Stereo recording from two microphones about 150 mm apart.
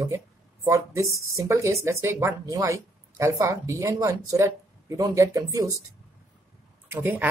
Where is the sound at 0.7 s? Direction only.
20° right (ahead or behind).